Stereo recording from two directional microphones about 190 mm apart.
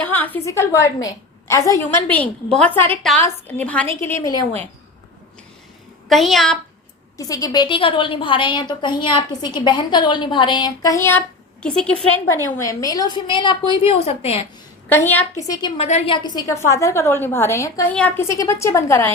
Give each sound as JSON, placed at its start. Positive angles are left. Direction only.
{"t": 0.0, "sound": "a woman's voice", "side_deg": 10}
{"t": 6.1, "sound": "a woman's voice", "side_deg": 0}
{"t": 7.2, "sound": "a woman's voice", "side_deg": 20}
{"t": 12.4, "sound": "a woman's voice", "side_deg": 15}
{"t": 14.8, "sound": "a woman's voice", "side_deg": 10}
{"t": 15.8, "sound": "a woman's voice", "side_deg": 35}
{"t": 16.1, "sound": "a woman's voice", "side_deg": 20}
{"t": 18.3, "sound": "a woman's voice", "side_deg": 15}